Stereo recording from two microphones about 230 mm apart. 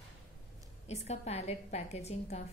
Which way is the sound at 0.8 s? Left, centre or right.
Left.